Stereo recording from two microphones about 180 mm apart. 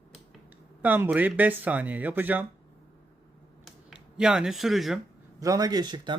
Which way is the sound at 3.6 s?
5° right (ahead or behind).